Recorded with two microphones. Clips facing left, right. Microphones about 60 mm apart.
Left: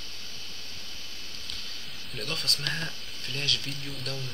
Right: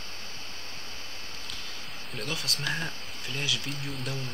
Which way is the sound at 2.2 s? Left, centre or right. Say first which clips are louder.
Even; centre.